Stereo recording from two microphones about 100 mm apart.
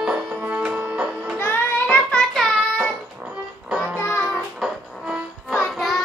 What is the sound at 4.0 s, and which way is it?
Music, 20° left (ahead or behind).